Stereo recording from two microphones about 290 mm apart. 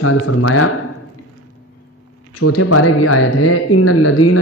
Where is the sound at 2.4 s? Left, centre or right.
Left.